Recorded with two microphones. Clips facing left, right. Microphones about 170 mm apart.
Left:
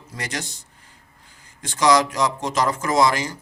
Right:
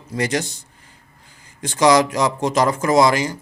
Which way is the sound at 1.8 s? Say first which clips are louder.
Right 3 dB; 10° right (ahead or behind).